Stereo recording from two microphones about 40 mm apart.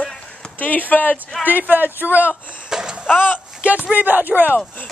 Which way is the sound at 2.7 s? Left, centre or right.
Centre.